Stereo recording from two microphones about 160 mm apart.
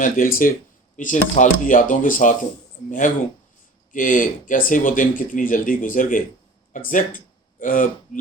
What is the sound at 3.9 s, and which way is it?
Speech, 55° left (ahead or behind).